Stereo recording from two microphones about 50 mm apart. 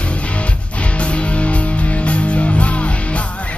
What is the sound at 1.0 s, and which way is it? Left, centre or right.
Music, left.